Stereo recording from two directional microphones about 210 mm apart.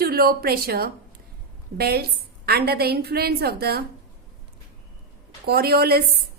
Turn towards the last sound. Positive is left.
turn(degrees=-50)  # may be behind; listen again after turning